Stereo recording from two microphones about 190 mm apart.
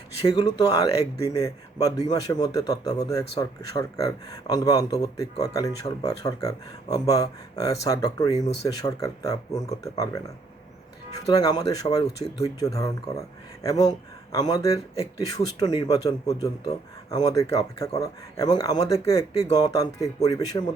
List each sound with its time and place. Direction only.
0.3 s speech: 20° left (ahead or behind)
11.3 s speech: 20° left (ahead or behind)